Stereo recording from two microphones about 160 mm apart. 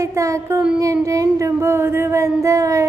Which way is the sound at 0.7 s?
20° right (ahead or behind).